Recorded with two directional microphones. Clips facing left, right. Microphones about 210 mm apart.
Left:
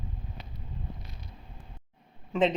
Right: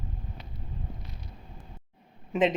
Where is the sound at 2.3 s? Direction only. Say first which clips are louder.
Right 1 dB; 15° right (ahead or behind).